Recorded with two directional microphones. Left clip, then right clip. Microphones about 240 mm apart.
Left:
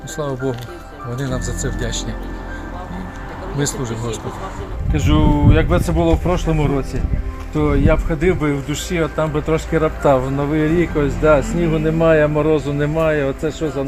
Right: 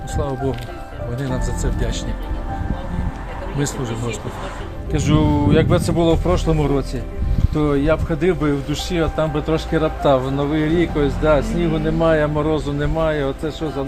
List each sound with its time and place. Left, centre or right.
0.2 s speech: centre
3.6 s speech: centre
7.5 s speech: centre; by 13.8 s left